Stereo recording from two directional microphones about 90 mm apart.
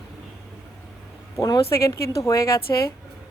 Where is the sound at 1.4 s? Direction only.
45° left (ahead or behind).